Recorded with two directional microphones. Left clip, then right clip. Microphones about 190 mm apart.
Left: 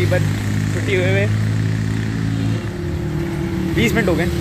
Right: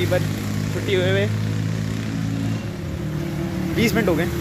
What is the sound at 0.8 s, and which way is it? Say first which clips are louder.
Speech: left 2 dB; 20° right (ahead or behind).